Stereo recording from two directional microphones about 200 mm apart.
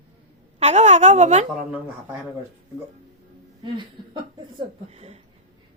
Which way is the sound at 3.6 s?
25° right (ahead or behind).